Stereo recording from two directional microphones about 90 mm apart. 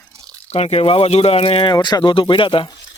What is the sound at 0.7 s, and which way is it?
Speech, 90° left.